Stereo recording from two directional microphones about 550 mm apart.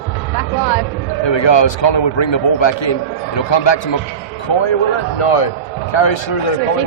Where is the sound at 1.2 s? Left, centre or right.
Left.